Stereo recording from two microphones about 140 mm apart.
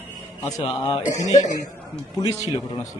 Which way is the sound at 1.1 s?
55° left (ahead or behind).